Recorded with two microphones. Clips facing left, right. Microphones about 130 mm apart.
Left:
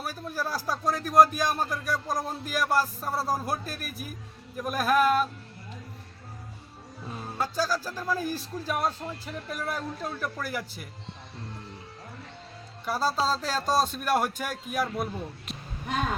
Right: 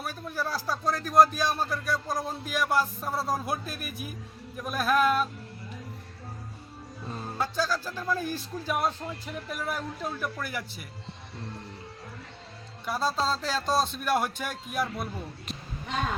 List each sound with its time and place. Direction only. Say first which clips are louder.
0.0 s speech: even; 5° left (ahead or behind)
1.3 s speech: left 1 dB; 50° left (ahead or behind)
1.5 s speech: even; 15° left (ahead or behind)
2.2 s a man's voice: even; centre (ahead or behind)
7.1 s a man's voice: even; 5° left (ahead or behind)
12.8 s a man's voice: left 1 dB; 5° left (ahead or behind)